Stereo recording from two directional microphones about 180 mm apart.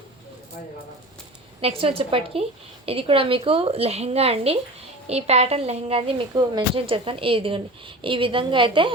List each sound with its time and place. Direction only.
1.6 s a woman's voice: 30° right (ahead or behind)